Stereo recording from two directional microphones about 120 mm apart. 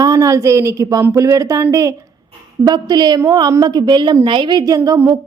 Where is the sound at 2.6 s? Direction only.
35° right (ahead or behind).